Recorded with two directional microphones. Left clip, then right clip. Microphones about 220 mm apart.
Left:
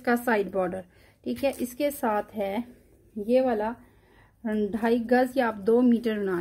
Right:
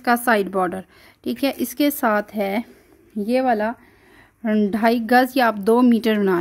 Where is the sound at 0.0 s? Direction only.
35° right (ahead or behind).